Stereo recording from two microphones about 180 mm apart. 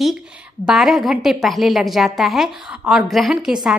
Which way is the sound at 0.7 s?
Centre (ahead or behind).